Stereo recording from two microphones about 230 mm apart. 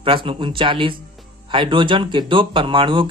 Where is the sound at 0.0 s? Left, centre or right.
Right.